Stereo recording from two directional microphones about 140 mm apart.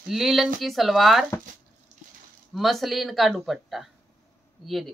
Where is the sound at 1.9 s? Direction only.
55° right (ahead or behind).